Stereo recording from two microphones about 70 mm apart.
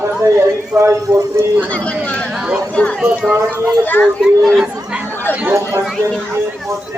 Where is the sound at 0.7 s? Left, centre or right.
Right.